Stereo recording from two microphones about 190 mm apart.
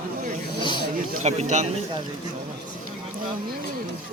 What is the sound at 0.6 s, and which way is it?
Speech, 25° left (ahead or behind).